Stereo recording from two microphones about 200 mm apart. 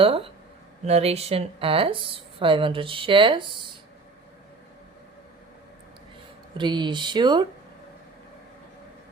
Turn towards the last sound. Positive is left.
turn(degrees=-25)  # may be behind; listen again after turning